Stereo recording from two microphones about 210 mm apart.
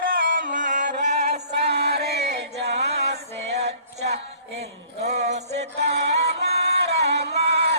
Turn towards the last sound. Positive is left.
turn(degrees=-50)  # may be behind; listen again after turning